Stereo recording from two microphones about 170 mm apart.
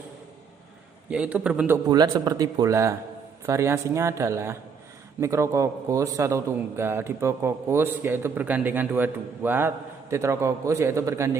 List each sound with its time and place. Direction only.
1.1 s a man's voice: 5° right (ahead or behind)
1.9 s a man's voice: 25° right (ahead or behind)